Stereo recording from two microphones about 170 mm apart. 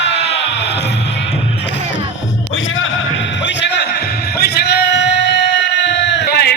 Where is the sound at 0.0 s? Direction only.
90° left.